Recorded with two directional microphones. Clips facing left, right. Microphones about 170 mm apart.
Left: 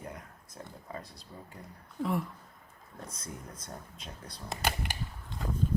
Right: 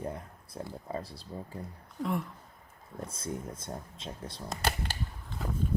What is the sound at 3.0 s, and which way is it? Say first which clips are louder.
Speech: right 7 dB; 30° right (ahead or behind).